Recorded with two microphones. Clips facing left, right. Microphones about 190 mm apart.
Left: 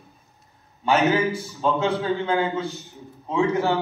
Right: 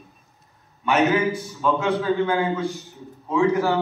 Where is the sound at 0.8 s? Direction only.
30° left (ahead or behind).